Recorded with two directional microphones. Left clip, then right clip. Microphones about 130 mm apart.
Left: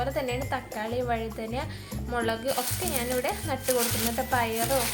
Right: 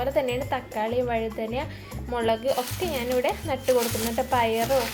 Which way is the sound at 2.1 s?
20° right (ahead or behind).